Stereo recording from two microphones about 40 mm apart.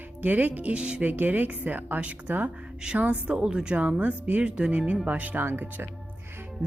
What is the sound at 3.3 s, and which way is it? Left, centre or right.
Speech, right.